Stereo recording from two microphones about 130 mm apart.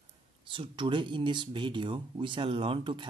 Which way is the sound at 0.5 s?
40° right (ahead or behind).